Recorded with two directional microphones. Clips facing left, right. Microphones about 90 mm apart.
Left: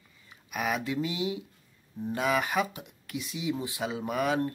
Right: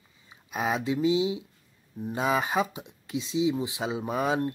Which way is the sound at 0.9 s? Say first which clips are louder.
Right 6 dB; 20° right (ahead or behind).